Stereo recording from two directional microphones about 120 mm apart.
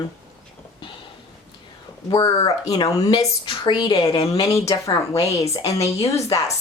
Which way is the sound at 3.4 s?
45° left (ahead or behind).